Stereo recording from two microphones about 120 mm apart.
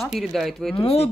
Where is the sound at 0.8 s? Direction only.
55° left (ahead or behind).